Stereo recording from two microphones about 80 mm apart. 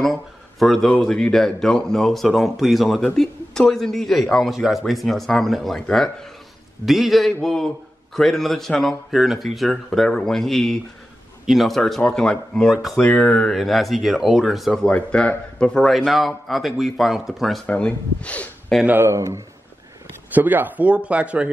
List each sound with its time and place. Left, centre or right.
0.0 s a man's voice: centre
13.1 s a man's voice: centre
13.5 s speech: centre
14.7 s a man's voice: centre
16.1 s speech: centre
17.6 s a man's voice: centre
18.7 s a man's voice: centre
19.0 s speech: right
20.3 s speech: right